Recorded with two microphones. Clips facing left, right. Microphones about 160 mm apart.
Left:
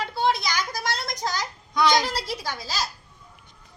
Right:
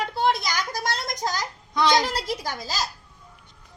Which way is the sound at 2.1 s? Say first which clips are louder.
Right 2 dB; 45° right (ahead or behind).